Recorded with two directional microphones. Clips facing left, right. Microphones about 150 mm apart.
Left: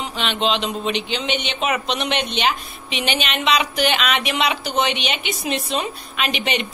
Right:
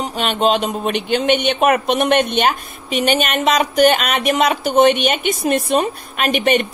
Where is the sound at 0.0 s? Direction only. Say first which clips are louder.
Right 5 dB; 45° right (ahead or behind).